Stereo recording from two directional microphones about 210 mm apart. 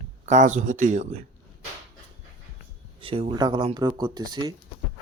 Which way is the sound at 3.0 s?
25° right (ahead or behind).